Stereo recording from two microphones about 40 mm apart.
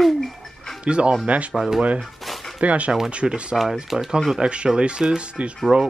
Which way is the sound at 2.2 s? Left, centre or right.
Centre.